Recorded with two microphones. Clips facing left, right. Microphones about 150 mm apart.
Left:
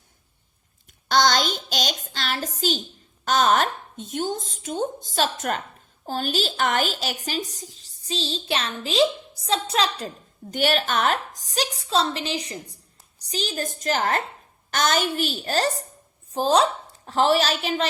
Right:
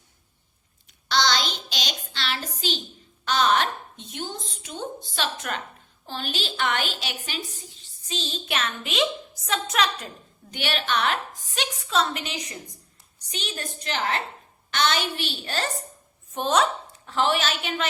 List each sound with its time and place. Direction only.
0.9 s a sound: 50° left (ahead or behind)
2.6 s a woman's voice: 45° left (ahead or behind)
10.5 s a woman's voice: 40° left (ahead or behind)